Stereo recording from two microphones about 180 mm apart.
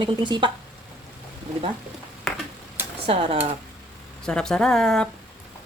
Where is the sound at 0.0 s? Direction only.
25° right (ahead or behind).